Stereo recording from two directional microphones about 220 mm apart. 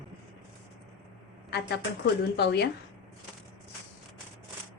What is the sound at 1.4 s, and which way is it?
A woman's voice, 50° left (ahead or behind).